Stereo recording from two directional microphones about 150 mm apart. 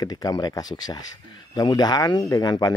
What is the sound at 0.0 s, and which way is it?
Speech, 25° left (ahead or behind).